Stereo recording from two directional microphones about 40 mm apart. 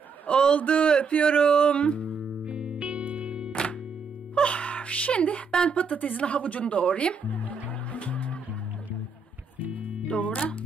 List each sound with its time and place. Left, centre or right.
0.3 s a man's voice: left
0.6 s a woman's voice: left
1.5 s a woman's voice: left
2.4 s music: right
4.4 s gasp: left
5.7 s a woman's voice: left
7.2 s music: left
10.0 s music: left